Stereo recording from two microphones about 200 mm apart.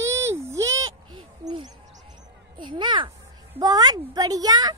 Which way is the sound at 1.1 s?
90° right.